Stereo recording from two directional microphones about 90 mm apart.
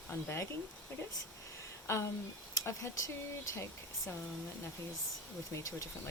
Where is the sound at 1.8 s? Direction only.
30° left (ahead or behind).